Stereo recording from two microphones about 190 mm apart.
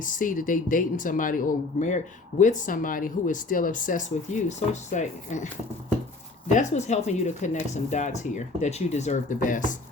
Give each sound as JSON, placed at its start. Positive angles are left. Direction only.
{"t": 0.0, "sound": "speech", "side_deg": 45}
{"t": 6.5, "sound": "speech", "side_deg": 40}